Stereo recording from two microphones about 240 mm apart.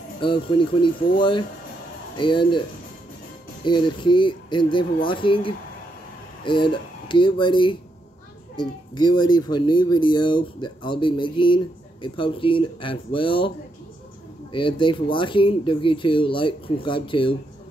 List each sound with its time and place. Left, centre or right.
0.2 s speech: left
3.6 s speech: centre
14.5 s speech: left